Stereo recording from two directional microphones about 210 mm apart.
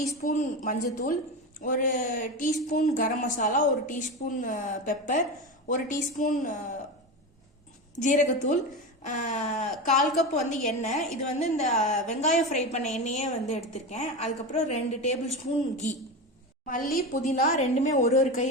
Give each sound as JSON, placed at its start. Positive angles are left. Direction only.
{"t": 0.2, "sound": "speech", "side_deg": 35}
{"t": 7.9, "sound": "speech", "side_deg": 40}
{"t": 16.6, "sound": "speech", "side_deg": 40}